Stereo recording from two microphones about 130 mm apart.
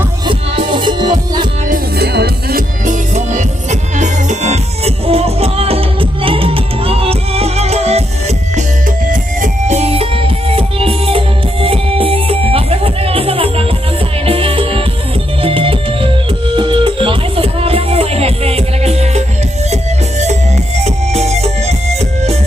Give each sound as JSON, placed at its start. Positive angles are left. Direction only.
{"t": 0.3, "sound": "music", "side_deg": -40}
{"t": 2.8, "sound": "music", "side_deg": -70}
{"t": 9.0, "sound": "music", "side_deg": -75}